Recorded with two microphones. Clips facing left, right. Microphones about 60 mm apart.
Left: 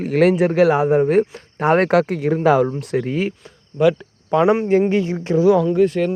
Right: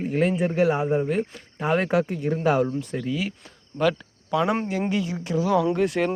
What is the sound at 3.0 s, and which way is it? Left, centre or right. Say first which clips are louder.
Speech: left 6 dB; left.